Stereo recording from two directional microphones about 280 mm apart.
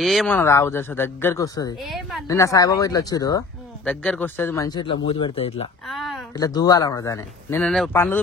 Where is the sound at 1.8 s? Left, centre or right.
Centre.